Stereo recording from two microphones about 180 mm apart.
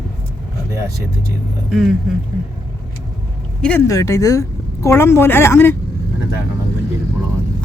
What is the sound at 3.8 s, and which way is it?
A woman's voice, 20° left (ahead or behind).